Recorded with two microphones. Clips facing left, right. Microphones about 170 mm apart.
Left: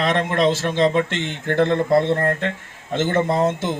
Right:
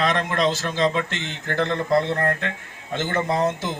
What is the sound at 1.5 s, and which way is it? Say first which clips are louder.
Speech: left 5 dB; 25° left (ahead or behind).